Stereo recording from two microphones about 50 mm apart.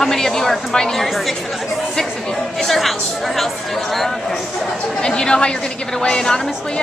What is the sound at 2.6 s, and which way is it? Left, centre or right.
Speech, centre.